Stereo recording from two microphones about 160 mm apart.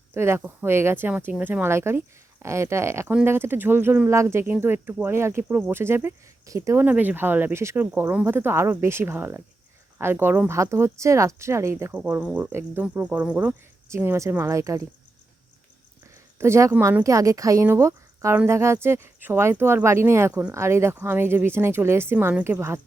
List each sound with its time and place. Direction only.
0.1 s speech: 15° right (ahead or behind)
16.4 s speech: 15° right (ahead or behind)